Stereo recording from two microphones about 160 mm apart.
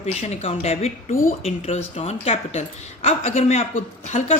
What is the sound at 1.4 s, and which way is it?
A woman's voice, 40° left (ahead or behind).